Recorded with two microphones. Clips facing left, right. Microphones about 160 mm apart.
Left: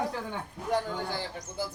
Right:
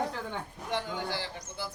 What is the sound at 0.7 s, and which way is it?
Speech, 45° left (ahead or behind).